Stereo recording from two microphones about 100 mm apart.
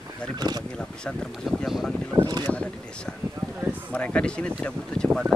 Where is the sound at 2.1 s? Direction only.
45° right (ahead or behind).